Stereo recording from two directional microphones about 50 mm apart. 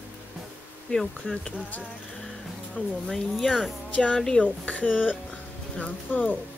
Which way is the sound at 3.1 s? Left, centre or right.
Centre.